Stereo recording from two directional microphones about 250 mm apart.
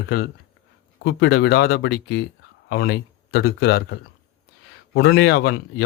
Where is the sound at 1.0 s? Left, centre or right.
Left.